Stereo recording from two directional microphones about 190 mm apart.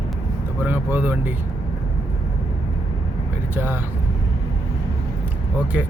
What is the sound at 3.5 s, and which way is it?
Speech, 10° right (ahead or behind).